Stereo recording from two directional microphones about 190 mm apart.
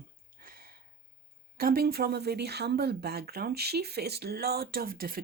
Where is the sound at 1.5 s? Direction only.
50° right (ahead or behind).